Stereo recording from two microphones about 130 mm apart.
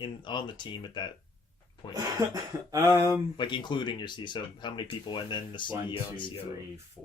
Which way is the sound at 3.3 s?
35° left (ahead or behind).